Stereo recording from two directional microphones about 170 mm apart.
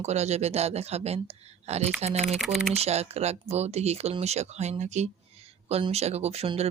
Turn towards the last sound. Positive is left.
turn(degrees=-35)  # may be behind; listen again after turning